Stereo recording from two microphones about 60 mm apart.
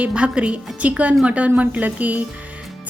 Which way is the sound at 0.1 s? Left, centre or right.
Centre.